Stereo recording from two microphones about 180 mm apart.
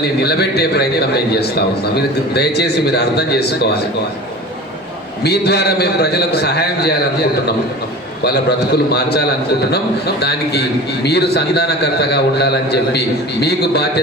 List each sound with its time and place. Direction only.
0.0 s a man's voice: 65° left (ahead or behind)
5.2 s a man's voice: 65° left (ahead or behind)
8.2 s a man's voice: 65° left (ahead or behind)